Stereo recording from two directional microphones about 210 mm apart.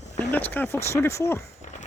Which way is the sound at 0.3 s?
10° left (ahead or behind).